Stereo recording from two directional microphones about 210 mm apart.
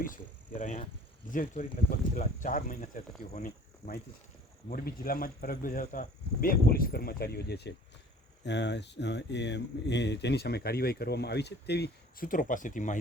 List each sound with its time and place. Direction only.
0.0 s speech: 40° left (ahead or behind)